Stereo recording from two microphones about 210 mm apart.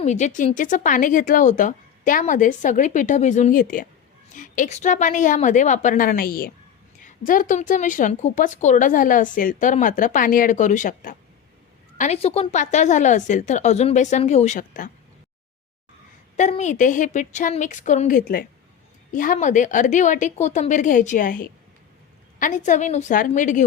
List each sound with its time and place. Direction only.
0.0 s a woman's voice: 35° left (ahead or behind)
16.4 s a woman's voice: 35° left (ahead or behind)